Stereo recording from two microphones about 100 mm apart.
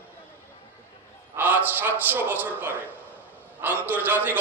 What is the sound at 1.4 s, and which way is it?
A man's voice, 15° right (ahead or behind).